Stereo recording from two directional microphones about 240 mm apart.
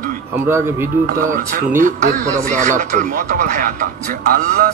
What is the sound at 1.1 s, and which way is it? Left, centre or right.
Speech, right.